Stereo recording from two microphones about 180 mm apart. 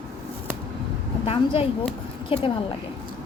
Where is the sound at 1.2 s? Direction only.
30° left (ahead or behind).